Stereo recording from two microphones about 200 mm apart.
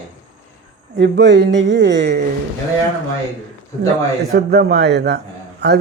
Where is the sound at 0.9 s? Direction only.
60° right (ahead or behind).